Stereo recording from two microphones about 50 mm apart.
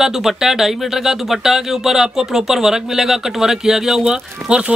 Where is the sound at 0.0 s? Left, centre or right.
Centre.